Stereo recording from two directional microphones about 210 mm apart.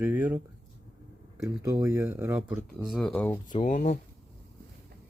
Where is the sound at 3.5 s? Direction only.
35° left (ahead or behind).